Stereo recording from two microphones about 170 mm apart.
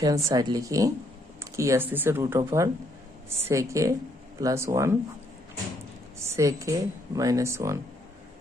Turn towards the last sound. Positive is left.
turn(degrees=-15)  # may be behind; listen again after turning